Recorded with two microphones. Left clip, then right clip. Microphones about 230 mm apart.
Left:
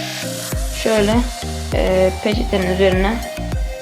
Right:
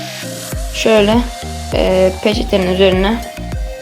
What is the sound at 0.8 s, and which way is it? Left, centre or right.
Music, right.